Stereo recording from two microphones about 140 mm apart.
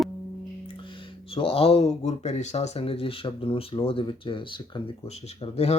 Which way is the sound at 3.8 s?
35° left (ahead or behind).